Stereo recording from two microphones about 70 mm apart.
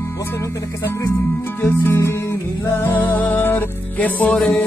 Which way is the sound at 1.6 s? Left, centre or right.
Left.